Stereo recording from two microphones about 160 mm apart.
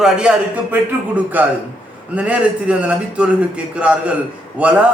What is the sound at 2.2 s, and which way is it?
A man's voice, 10° right (ahead or behind).